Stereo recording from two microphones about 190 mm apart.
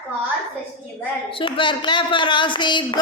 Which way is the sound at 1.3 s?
25° left (ahead or behind).